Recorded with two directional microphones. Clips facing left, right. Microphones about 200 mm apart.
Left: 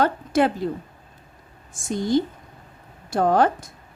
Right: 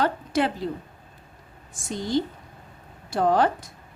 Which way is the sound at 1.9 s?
50° left (ahead or behind).